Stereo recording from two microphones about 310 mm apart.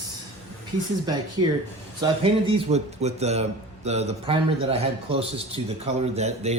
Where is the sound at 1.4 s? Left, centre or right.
Centre.